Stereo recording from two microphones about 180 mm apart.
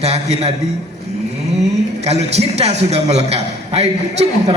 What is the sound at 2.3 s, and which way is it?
A man's voice, 35° right (ahead or behind).